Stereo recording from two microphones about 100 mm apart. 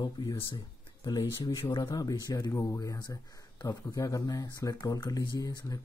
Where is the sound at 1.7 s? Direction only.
40° left (ahead or behind).